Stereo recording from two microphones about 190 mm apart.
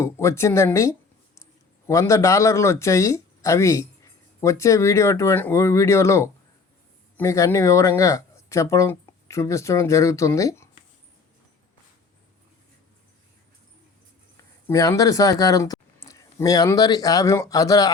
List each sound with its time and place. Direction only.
0.0 s speech: 15° left (ahead or behind)
14.7 s speech: 15° left (ahead or behind)